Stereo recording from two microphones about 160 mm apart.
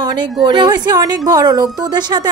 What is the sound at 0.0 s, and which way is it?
A woman's voice, 25° right (ahead or behind).